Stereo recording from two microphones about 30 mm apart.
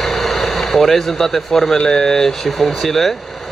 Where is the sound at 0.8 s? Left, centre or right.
Centre.